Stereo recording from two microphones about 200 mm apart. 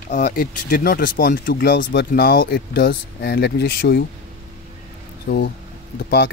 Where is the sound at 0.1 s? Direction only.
40° left (ahead or behind).